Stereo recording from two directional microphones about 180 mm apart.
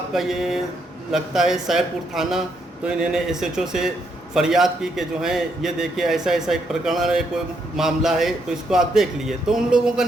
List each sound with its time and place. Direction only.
0.1 s a man's voice: centre (ahead or behind)